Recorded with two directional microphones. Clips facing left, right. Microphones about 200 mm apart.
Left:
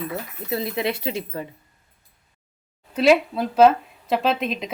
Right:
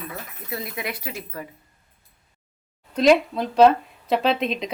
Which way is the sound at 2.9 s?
5° left (ahead or behind).